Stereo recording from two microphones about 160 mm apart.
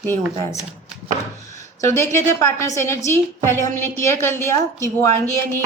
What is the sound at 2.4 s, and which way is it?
A woman's voice, 15° left (ahead or behind).